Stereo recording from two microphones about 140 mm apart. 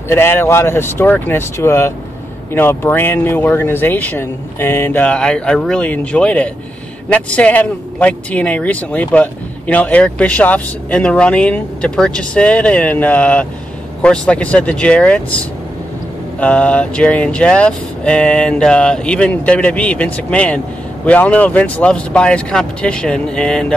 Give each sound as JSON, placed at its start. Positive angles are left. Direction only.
{"t": 0.1, "sound": "speech", "side_deg": 15}
{"t": 16.3, "sound": "speech", "side_deg": 10}